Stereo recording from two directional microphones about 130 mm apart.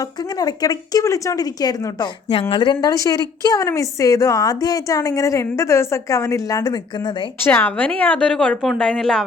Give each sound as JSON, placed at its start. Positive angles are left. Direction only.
{"t": 0.0, "sound": "a woman's voice", "side_deg": 30}
{"t": 7.4, "sound": "a woman's voice", "side_deg": 15}